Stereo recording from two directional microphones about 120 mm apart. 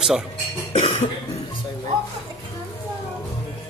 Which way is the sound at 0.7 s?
55° left (ahead or behind).